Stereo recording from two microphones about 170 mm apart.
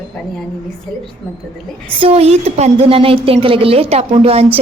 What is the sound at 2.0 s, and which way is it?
A woman's voice, 35° right (ahead or behind).